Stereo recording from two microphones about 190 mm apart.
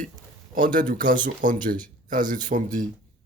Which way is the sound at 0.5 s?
45° right (ahead or behind).